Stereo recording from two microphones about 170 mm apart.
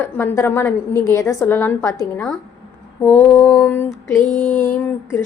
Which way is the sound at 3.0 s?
10° left (ahead or behind).